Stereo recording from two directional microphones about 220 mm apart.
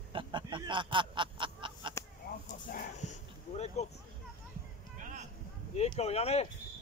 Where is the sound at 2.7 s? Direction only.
35° left (ahead or behind).